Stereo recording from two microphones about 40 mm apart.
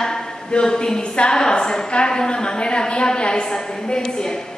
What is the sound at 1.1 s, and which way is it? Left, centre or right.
A woman's voice, left.